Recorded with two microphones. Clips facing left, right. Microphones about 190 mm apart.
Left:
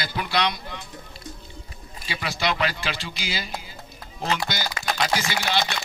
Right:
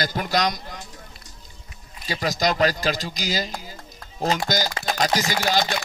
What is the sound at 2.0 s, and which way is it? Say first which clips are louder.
Speech: right 4 dB; 40° right (ahead or behind).